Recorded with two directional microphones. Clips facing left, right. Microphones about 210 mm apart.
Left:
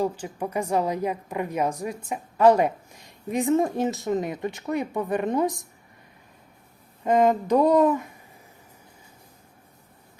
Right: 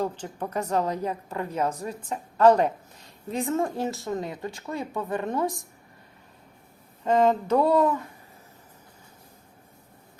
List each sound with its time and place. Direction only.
0.0 s a woman's voice: 10° left (ahead or behind)
7.0 s a woman's voice: 15° left (ahead or behind)